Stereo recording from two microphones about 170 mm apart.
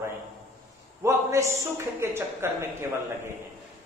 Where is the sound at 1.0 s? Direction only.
15° right (ahead or behind).